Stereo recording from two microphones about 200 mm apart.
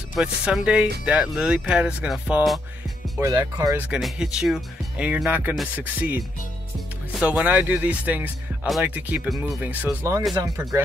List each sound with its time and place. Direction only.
0.1 s speech: 5° right (ahead or behind)
3.2 s speech: 15° right (ahead or behind)
3.7 s speech: 5° right (ahead or behind)
7.2 s speech: 5° right (ahead or behind)